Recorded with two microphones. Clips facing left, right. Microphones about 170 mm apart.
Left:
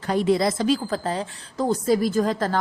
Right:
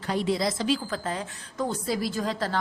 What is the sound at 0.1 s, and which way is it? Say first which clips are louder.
A woman's voice: left 6 dB; 50° left (ahead or behind).